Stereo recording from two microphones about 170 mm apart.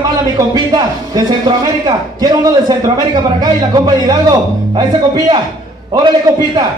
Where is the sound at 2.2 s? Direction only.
25° right (ahead or behind).